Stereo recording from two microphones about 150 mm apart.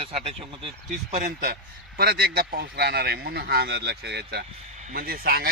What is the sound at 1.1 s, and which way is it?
Speech, 60° right (ahead or behind).